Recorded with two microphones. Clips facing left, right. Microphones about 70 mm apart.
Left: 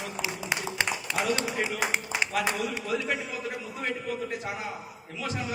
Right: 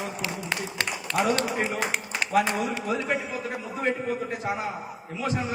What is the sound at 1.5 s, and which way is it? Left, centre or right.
Speech, right.